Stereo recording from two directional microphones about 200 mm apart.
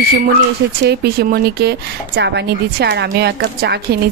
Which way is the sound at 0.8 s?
55° right (ahead or behind).